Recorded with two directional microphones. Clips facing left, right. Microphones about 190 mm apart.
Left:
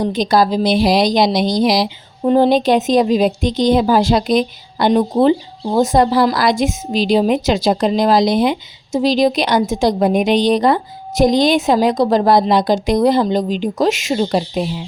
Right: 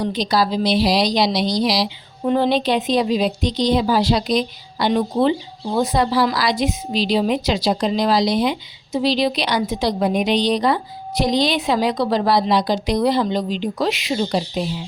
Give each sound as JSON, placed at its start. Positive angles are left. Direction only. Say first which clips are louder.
{"t": 0.0, "sound": "a woman's voice", "louder": "left 5 dB", "side_deg": 50}
{"t": 2.2, "sound": "a woman's voice", "louder": "left 5 dB", "side_deg": 40}